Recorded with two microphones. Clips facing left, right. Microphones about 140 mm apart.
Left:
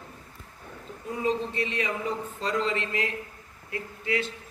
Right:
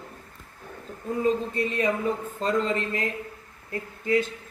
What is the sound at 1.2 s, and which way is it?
Speech, 45° right (ahead or behind).